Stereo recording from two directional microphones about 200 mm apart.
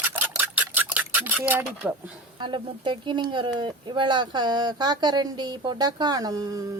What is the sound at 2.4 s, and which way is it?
Speech, 25° right (ahead or behind).